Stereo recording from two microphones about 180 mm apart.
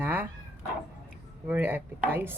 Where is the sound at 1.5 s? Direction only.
10° right (ahead or behind).